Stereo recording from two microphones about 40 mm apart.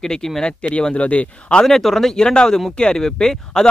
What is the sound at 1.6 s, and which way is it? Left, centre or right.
Speech, centre.